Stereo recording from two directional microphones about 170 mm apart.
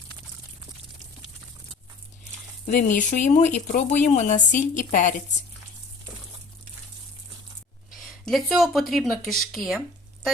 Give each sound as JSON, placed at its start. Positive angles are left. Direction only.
{"t": 2.6, "sound": "speech", "side_deg": 45}
{"t": 8.0, "sound": "speech", "side_deg": 0}